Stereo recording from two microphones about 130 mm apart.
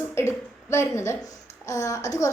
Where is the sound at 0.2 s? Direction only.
20° left (ahead or behind).